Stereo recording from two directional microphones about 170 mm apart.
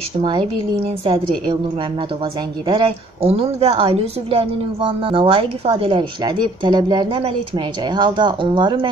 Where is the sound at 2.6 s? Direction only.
30° right (ahead or behind).